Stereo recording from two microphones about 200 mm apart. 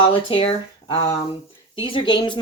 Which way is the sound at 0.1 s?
25° left (ahead or behind).